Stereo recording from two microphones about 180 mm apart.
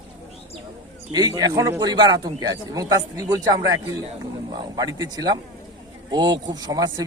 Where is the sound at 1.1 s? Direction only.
20° right (ahead or behind).